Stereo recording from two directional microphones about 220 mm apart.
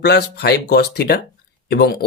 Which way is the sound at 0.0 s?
50° left (ahead or behind).